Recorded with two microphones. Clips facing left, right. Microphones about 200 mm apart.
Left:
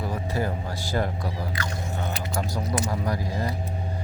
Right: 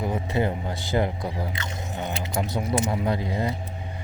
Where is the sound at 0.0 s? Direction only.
20° right (ahead or behind).